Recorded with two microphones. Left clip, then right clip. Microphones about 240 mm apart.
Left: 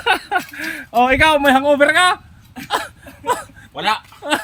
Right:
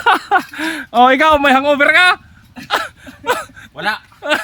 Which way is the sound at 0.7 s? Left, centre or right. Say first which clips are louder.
Right 4 dB; centre.